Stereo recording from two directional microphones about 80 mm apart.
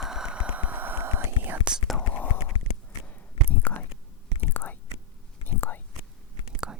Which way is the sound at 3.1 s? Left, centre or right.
Centre.